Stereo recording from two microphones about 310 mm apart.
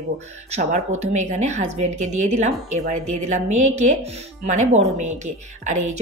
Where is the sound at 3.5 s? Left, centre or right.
Right.